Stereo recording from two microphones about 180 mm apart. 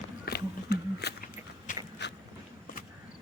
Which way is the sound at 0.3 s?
65° left (ahead or behind).